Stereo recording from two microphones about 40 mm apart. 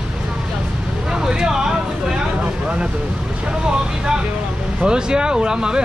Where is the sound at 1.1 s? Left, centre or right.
Centre.